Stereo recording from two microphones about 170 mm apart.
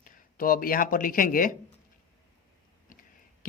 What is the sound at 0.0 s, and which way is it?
Speech, 55° left (ahead or behind).